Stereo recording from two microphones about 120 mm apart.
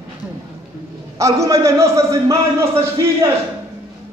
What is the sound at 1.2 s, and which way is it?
A man's voice, 25° right (ahead or behind).